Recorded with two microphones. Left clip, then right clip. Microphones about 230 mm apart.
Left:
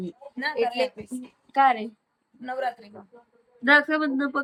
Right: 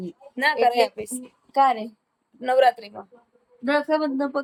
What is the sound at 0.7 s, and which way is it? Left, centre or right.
Speech, right.